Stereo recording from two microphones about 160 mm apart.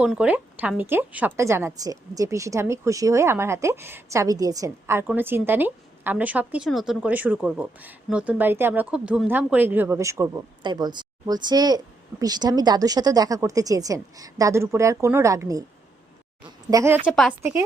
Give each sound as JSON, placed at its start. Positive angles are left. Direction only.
{"t": 0.0, "sound": "a woman's voice", "side_deg": -5}
{"t": 16.6, "sound": "speech", "side_deg": -20}
{"t": 17.1, "sound": "a woman's voice", "side_deg": 0}